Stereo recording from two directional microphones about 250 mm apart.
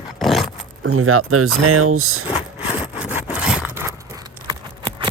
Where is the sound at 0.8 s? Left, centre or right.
Right.